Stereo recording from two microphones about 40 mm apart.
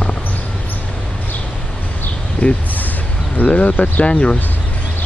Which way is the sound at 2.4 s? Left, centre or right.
Left.